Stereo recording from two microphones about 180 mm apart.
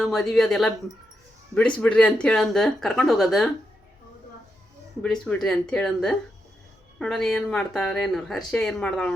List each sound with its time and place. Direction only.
0.0 s speech: centre (ahead or behind)
1.8 s speech: 5° left (ahead or behind)
5.0 s speech: 5° left (ahead or behind)